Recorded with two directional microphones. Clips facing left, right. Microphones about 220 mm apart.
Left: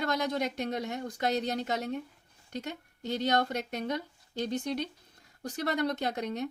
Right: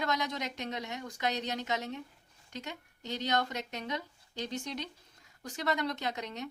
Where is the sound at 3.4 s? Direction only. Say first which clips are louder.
Left 5 dB; 55° left (ahead or behind).